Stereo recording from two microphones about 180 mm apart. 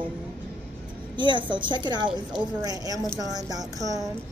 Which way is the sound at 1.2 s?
25° right (ahead or behind).